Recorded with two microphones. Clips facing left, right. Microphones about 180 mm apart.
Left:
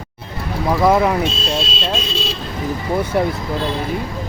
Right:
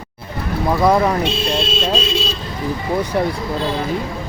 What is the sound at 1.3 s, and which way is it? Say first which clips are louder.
Speech: right 2 dB; 60° right (ahead or behind).